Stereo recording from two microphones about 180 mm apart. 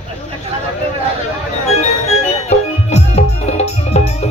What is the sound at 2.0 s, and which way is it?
Music, 35° left (ahead or behind).